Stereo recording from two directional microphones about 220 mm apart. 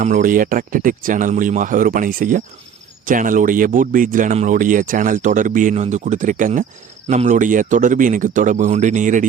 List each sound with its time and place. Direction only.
0.0 s speech: 35° right (ahead or behind)